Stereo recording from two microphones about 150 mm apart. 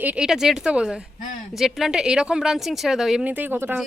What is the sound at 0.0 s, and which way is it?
Speech, 10° right (ahead or behind).